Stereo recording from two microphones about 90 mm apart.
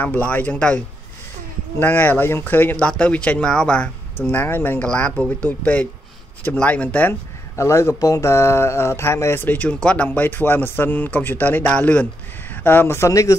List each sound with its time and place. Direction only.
0.0 s speech: 20° left (ahead or behind)
1.8 s speech: 20° left (ahead or behind)
4.2 s speech: 20° left (ahead or behind)
4.8 s speech: 15° left (ahead or behind)
7.5 s speech: 35° left (ahead or behind)